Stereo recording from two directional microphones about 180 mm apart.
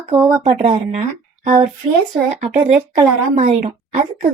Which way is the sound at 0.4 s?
35° right (ahead or behind).